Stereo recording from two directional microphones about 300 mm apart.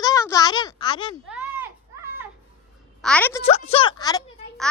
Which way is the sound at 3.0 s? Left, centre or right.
Centre.